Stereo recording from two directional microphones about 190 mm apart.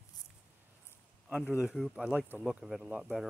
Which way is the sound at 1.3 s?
5° right (ahead or behind).